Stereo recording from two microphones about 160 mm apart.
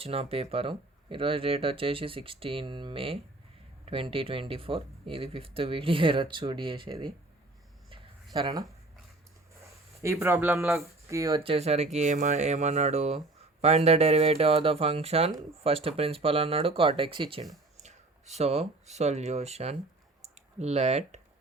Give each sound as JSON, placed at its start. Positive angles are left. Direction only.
{"t": 0.0, "sound": "speech", "side_deg": -35}
{"t": 7.9, "sound": "a sound", "side_deg": -30}
{"t": 10.0, "sound": "speech", "side_deg": -20}
{"t": 11.3, "sound": "speech", "side_deg": -35}